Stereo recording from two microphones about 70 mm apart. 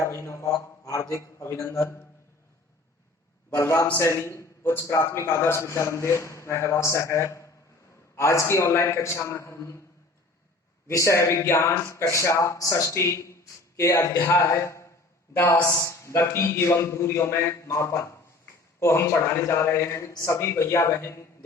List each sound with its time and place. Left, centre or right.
0.1 s speech: left
0.5 s a man's voice: left
1.1 s a man's voice: left
3.6 s a man's voice: left
10.8 s a man's voice: left
15.4 s speech: left
15.8 s a man's voice: left